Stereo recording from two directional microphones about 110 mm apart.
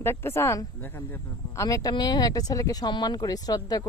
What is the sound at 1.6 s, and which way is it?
Speech, 35° left (ahead or behind).